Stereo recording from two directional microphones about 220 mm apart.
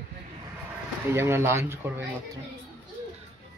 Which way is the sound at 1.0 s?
10° right (ahead or behind).